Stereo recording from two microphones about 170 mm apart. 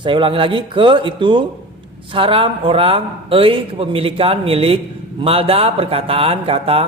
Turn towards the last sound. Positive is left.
turn(degrees=-35)  # may be behind; listen again after turning